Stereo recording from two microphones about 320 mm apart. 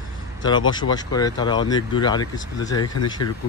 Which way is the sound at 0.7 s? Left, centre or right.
Centre.